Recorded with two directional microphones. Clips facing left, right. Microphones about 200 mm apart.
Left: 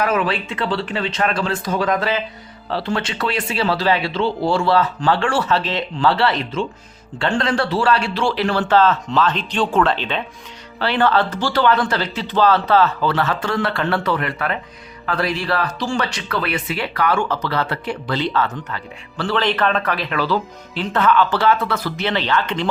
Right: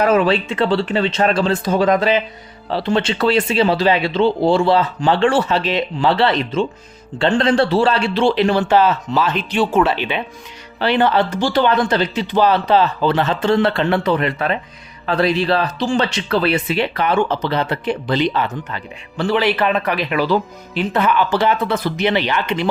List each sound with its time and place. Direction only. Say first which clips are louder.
0.0 s a man's voice: right 5 dB; 30° right (ahead or behind); by 22.7 s 10° right (ahead or behind)